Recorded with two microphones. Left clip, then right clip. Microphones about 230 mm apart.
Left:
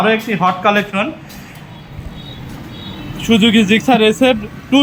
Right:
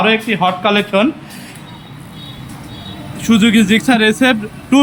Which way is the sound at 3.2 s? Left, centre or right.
Centre.